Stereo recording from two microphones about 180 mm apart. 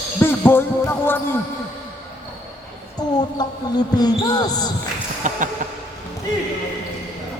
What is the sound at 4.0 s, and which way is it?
Basketball bounce, 20° left (ahead or behind).